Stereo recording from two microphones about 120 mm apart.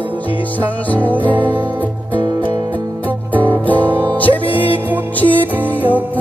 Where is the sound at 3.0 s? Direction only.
15° left (ahead or behind).